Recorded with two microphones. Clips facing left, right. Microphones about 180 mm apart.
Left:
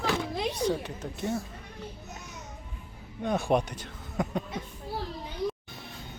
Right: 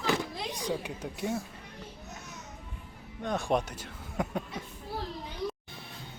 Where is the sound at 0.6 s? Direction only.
10° right (ahead or behind).